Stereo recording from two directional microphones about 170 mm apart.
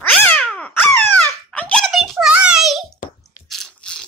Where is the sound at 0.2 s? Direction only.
10° left (ahead or behind).